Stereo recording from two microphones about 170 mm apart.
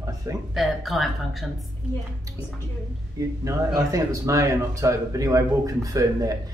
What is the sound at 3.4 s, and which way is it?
A man's voice, 20° right (ahead or behind).